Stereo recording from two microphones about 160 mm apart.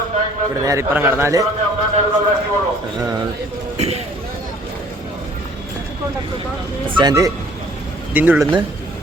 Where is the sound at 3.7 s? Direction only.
40° right (ahead or behind).